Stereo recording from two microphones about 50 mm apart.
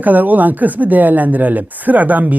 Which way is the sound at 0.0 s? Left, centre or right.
Right.